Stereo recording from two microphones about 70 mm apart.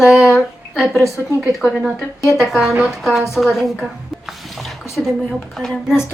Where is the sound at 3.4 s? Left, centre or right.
Left.